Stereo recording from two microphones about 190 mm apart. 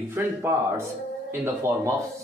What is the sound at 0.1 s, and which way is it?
Speech, 15° right (ahead or behind).